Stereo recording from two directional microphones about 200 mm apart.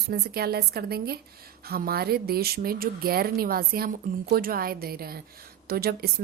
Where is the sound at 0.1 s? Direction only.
50° right (ahead or behind).